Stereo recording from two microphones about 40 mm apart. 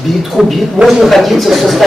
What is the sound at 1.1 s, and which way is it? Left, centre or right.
Speech, centre.